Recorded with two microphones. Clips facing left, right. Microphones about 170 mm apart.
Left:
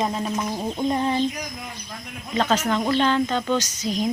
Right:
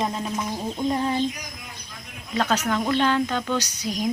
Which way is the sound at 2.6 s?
5° right (ahead or behind).